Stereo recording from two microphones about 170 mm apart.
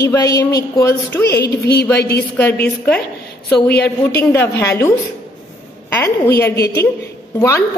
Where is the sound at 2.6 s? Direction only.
10° left (ahead or behind).